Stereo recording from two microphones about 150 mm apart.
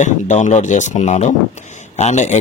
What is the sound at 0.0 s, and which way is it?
A man's voice, 50° left (ahead or behind).